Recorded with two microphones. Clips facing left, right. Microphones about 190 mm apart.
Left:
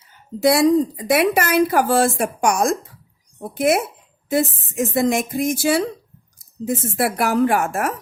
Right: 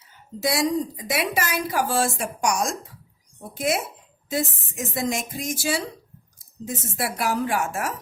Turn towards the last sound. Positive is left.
turn(degrees=55)  # may be behind; listen again after turning